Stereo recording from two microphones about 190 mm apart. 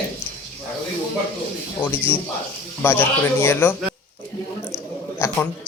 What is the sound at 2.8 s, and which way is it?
Speech, 10° left (ahead or behind).